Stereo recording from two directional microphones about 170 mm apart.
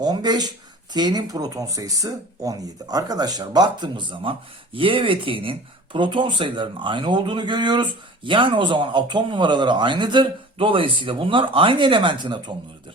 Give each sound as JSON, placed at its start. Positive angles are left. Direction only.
{"t": 0.0, "sound": "speech", "side_deg": -25}